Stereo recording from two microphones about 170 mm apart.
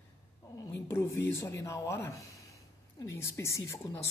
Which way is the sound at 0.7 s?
15° left (ahead or behind).